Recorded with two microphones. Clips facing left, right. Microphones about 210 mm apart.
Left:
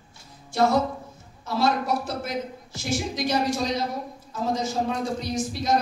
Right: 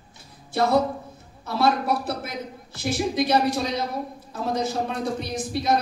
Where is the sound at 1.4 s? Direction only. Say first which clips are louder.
Right 2 dB; 55° right (ahead or behind).